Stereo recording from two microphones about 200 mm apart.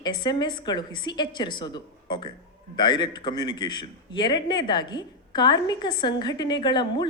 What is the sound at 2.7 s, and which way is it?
A man's voice, 20° left (ahead or behind).